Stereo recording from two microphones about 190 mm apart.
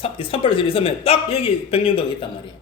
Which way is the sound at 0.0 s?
30° left (ahead or behind).